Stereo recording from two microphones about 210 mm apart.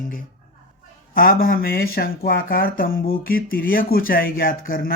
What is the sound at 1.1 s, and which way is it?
Speech, 45° left (ahead or behind).